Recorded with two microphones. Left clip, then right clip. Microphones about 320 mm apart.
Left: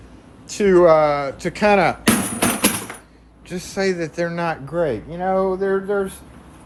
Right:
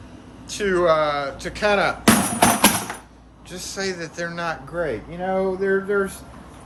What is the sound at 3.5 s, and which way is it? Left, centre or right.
Speech, centre.